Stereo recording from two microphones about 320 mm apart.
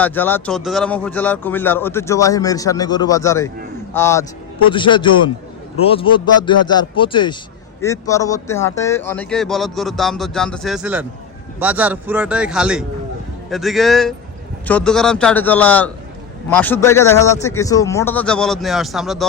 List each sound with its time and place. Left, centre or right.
0.0 s a man's voice: centre